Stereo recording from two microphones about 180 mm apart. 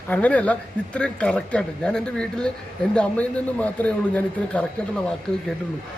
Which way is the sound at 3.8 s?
10° left (ahead or behind).